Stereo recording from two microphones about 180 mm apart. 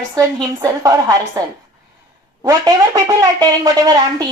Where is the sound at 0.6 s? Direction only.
20° right (ahead or behind).